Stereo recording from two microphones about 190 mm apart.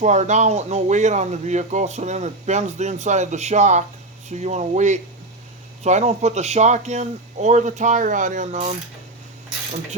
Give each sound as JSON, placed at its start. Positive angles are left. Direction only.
{"t": 0.0, "sound": "speech", "side_deg": -40}